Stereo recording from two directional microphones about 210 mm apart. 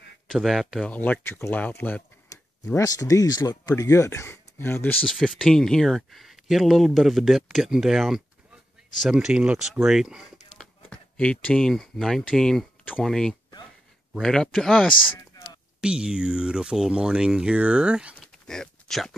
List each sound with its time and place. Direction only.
0.3 s speech: centre (ahead or behind)
15.3 s a sound: 20° left (ahead or behind)
15.8 s speech: 5° right (ahead or behind)